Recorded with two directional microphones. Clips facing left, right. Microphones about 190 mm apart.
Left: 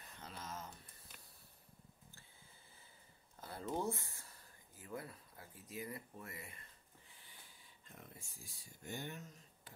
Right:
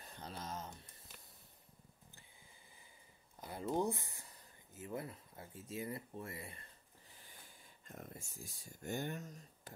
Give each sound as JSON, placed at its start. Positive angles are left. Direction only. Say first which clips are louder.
{"t": 0.0, "sound": "a sound", "louder": "right 4 dB", "side_deg": -35}
{"t": 3.3, "sound": "speech", "louder": "right 4 dB", "side_deg": -15}
{"t": 7.9, "sound": "speech", "louder": "right 6 dB", "side_deg": -45}